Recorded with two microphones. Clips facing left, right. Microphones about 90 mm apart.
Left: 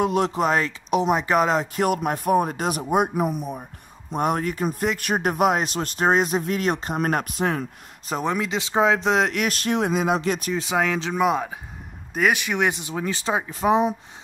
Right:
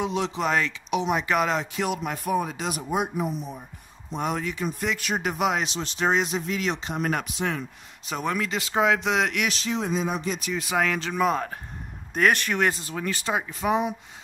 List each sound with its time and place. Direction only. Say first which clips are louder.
0.0 s speech: left 5 dB; 50° left (ahead or behind)
9.6 s speech: left 4 dB; 60° left (ahead or behind); by 10.4 s 80° left
10.7 s speech: left 2 dB; 15° left (ahead or behind)
11.0 s speech: left 3 dB; 5° left (ahead or behind)
13.1 s speech: left 2 dB; 25° left (ahead or behind)